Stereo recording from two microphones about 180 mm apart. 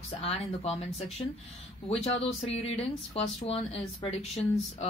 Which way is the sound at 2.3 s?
35° left (ahead or behind).